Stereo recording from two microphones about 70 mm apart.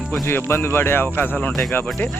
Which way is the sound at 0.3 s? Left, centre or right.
Left.